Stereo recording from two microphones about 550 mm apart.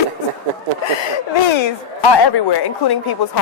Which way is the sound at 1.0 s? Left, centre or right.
Left.